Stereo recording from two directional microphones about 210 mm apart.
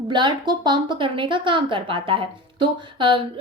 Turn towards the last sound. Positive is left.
turn(degrees=-25)  # may be behind; listen again after turning